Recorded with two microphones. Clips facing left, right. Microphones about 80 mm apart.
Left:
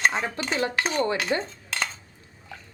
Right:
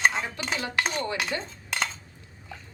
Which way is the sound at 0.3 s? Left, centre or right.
Centre.